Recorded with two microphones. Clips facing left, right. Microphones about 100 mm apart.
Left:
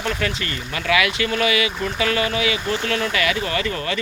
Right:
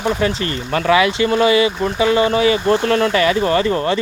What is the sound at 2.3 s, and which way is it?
Speech, 35° right (ahead or behind).